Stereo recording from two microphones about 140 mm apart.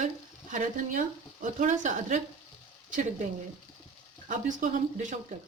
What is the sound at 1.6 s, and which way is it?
Speech, 65° right (ahead or behind).